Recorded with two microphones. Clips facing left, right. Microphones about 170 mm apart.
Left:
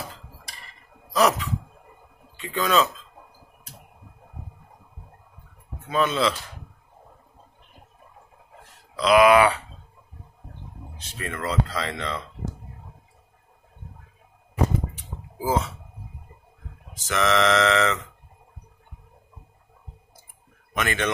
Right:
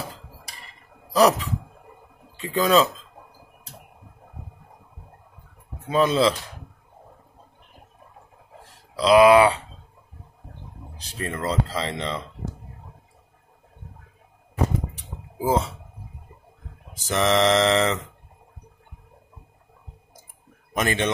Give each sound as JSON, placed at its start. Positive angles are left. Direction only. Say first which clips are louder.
{"t": 1.1, "sound": "speech", "louder": "right 3 dB", "side_deg": -35}
{"t": 5.9, "sound": "speech", "louder": "right 3 dB", "side_deg": -35}
{"t": 8.9, "sound": "speech", "louder": "right 2 dB", "side_deg": -30}
{"t": 11.0, "sound": "speech", "louder": "right 3 dB", "side_deg": -35}
{"t": 15.3, "sound": "speech", "louder": "right 2 dB", "side_deg": -30}
{"t": 16.9, "sound": "speech", "louder": "right 2 dB", "side_deg": -35}
{"t": 20.7, "sound": "speech", "louder": "right 3 dB", "side_deg": -30}